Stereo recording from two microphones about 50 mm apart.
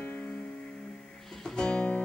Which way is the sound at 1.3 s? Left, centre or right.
Centre.